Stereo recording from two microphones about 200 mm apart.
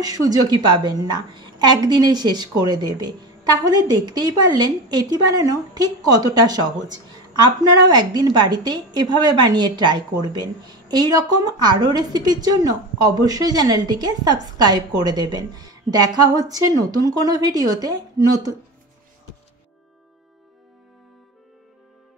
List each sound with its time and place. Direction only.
0.0 s a woman's voice: 20° right (ahead or behind)